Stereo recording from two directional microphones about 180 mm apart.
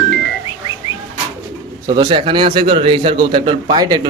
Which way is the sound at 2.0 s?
30° right (ahead or behind).